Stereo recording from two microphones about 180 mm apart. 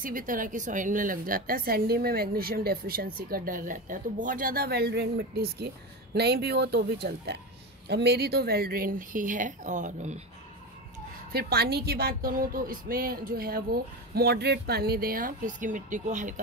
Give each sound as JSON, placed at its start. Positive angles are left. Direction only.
{"t": 0.0, "sound": "a woman's voice", "side_deg": -50}
{"t": 11.3, "sound": "a woman's voice", "side_deg": -60}